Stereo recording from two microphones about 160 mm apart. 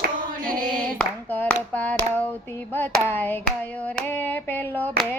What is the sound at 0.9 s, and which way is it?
Hands, 10° left (ahead or behind).